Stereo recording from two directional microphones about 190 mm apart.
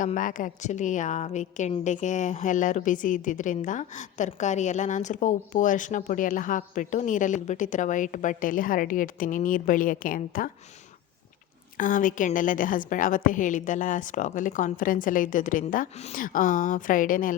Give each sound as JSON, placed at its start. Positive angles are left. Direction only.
{"t": 0.0, "sound": "a woman's voice", "side_deg": 45}
{"t": 11.8, "sound": "a woman's voice", "side_deg": 45}